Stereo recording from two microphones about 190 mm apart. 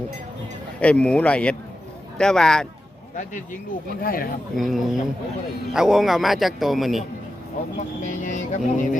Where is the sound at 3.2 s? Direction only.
40° left (ahead or behind).